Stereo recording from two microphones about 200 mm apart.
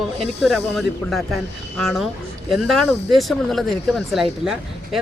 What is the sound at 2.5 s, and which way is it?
Speech, centre (ahead or behind).